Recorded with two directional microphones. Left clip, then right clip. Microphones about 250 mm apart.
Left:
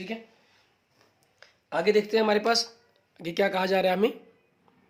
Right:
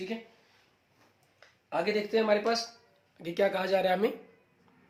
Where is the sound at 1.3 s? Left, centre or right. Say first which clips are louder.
Left 3 dB; left.